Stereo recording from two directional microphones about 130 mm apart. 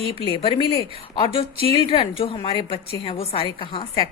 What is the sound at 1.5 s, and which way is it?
Speech, 50° right (ahead or behind).